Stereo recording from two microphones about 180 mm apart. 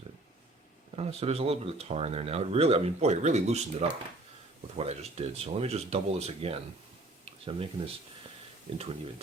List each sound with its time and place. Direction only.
0.9 s speech: 35° right (ahead or behind)
7.3 s a sound: 30° right (ahead or behind)
8.7 s speech: 35° right (ahead or behind)